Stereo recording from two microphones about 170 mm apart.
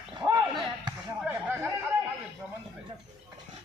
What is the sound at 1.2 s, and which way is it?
Chatter, 10° right (ahead or behind).